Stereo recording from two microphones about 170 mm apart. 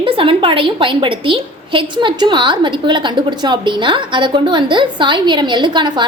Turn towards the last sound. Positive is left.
turn(degrees=-25)  # may be behind; listen again after turning